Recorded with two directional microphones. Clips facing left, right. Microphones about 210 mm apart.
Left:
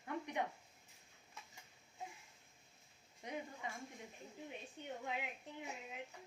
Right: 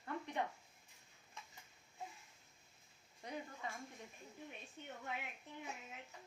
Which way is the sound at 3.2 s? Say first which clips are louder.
Left 1 dB; 20° left (ahead or behind).